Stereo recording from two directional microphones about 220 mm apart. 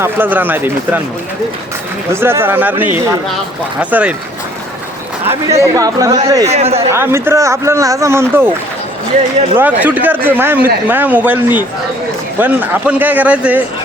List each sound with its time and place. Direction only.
0.0 s speech: 10° right (ahead or behind)
2.2 s speech: 10° right (ahead or behind)
5.2 s speech: 10° right (ahead or behind)
6.5 s speech: 30° right (ahead or behind)
6.7 s speech: 10° right (ahead or behind)
9.6 s speech: 5° right (ahead or behind)